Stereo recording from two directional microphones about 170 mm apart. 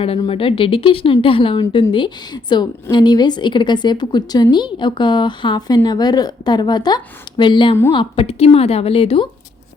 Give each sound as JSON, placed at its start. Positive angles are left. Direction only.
{"t": 0.0, "sound": "a woman's voice", "side_deg": 35}